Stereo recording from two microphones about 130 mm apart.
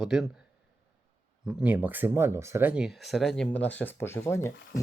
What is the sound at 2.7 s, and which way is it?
Speech, 5° right (ahead or behind).